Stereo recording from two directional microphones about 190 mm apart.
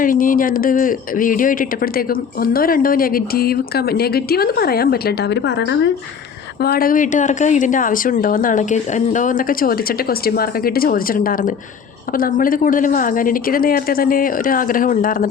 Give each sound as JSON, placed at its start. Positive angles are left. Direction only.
{"t": 0.0, "sound": "a man's voice", "side_deg": 45}
{"t": 6.6, "sound": "a man's voice", "side_deg": 50}